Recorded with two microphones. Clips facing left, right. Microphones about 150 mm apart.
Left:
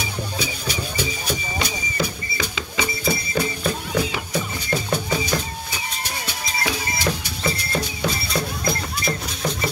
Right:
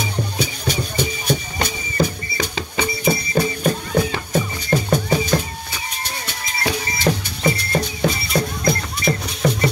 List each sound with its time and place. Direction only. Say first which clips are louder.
0.0 s music: right 4 dB; 50° right (ahead or behind)
6.6 s music: right 4 dB; 50° right (ahead or behind)